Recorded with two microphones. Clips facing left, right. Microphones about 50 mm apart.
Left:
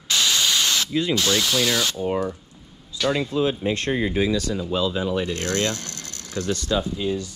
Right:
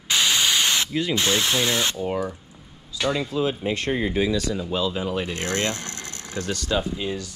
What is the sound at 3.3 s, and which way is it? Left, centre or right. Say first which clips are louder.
Speech: left 2 dB; left.